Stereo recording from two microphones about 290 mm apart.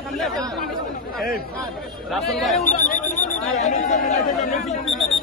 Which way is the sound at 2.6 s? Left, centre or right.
Left.